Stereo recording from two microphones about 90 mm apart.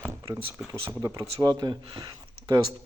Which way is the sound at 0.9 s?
30° right (ahead or behind).